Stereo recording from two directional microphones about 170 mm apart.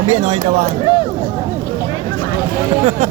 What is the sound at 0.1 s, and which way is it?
Speech, 40° right (ahead or behind).